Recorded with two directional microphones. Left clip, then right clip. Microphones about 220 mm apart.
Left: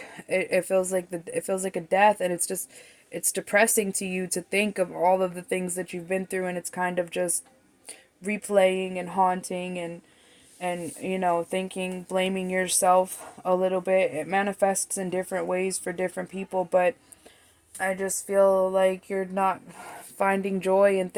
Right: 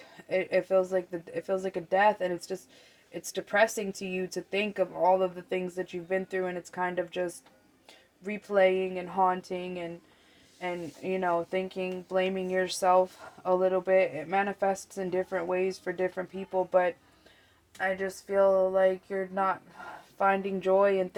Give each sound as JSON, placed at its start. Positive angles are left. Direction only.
{"t": 0.3, "sound": "speech", "side_deg": 55}
{"t": 8.4, "sound": "speech", "side_deg": 50}